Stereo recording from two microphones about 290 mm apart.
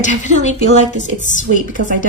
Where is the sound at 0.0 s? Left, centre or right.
Left.